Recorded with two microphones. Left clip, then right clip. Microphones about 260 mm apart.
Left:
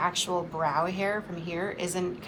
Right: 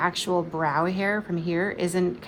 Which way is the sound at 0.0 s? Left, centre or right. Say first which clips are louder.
Right 3 dB; right.